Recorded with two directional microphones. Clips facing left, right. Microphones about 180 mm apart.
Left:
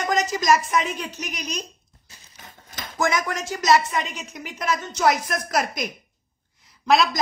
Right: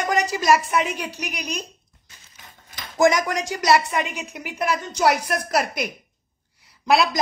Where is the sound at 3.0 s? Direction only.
15° right (ahead or behind).